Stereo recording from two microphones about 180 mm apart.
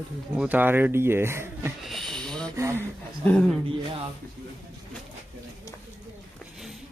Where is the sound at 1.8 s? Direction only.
Centre (ahead or behind).